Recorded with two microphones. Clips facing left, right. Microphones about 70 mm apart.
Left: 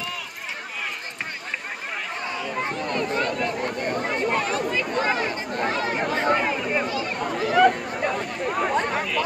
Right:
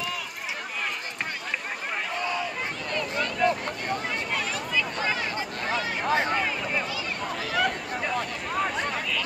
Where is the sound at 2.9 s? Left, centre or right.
Left.